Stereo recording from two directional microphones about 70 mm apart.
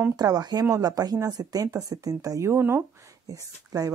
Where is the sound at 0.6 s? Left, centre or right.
Right.